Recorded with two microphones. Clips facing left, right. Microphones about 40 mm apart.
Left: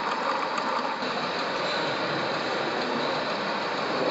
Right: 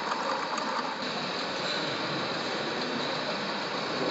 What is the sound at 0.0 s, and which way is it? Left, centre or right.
Vehicle, centre.